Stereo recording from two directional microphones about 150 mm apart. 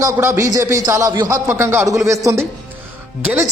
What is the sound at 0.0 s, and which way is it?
Speech, 20° right (ahead or behind).